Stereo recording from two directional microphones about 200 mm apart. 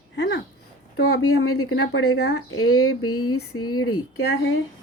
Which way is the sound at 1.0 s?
90° left.